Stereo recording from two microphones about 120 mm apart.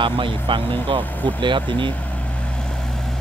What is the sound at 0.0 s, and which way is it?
Speech, 45° right (ahead or behind).